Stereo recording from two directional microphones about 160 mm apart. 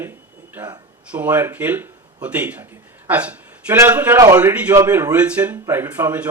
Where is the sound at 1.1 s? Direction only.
10° right (ahead or behind).